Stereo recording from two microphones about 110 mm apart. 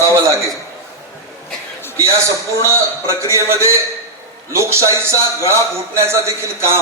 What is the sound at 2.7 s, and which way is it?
A man's voice, 25° right (ahead or behind).